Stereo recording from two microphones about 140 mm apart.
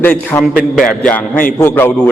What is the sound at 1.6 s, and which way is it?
Speech, 15° left (ahead or behind).